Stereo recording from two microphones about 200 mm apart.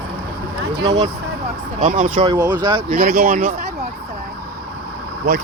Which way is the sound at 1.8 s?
40° right (ahead or behind).